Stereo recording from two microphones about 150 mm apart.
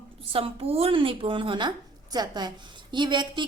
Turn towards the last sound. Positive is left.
turn(degrees=-30)  # may be behind; listen again after turning